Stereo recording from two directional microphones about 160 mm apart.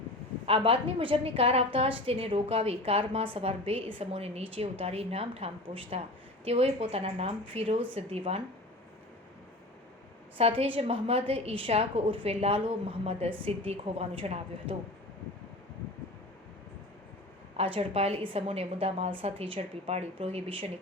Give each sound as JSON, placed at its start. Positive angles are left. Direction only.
{"t": 0.4, "sound": "a woman's voice", "side_deg": -35}
{"t": 10.3, "sound": "a woman's voice", "side_deg": -35}
{"t": 17.6, "sound": "a woman's voice", "side_deg": -35}